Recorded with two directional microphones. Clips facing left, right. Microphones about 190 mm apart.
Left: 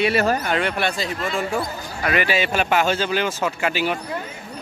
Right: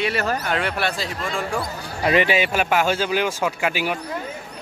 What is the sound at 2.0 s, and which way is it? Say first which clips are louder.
Speech: right 3 dB; 25° right (ahead or behind).